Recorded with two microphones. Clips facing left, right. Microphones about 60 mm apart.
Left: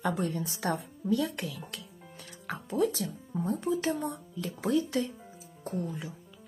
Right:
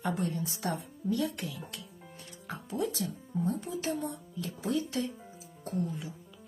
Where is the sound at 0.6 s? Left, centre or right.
Left.